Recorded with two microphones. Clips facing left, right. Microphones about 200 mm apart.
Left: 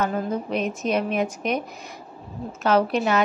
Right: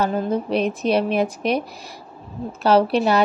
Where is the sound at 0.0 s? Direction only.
30° right (ahead or behind).